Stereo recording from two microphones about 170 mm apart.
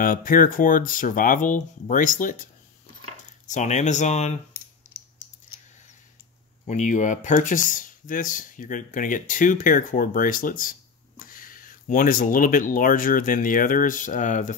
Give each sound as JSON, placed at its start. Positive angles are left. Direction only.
{"t": 0.0, "sound": "speech", "side_deg": 55}
{"t": 3.4, "sound": "speech", "side_deg": 45}
{"t": 6.6, "sound": "speech", "side_deg": 45}